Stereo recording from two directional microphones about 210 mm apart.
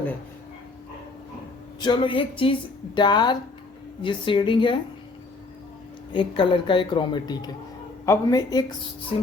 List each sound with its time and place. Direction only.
1.8 s a woman's voice: 20° left (ahead or behind)
6.1 s a woman's voice: 25° left (ahead or behind)